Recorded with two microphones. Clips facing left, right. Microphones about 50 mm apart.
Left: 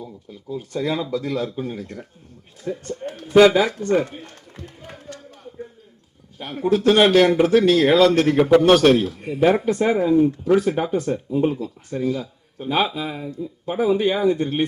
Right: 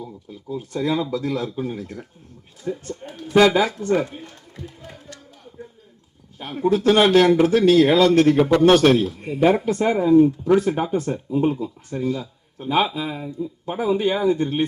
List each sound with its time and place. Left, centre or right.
0.0 s speech: centre
2.7 s speech: centre
3.4 s speech: centre
4.3 s a sound: left
6.4 s speech: centre